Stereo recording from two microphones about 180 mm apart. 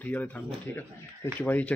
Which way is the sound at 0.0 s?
10° left (ahead or behind).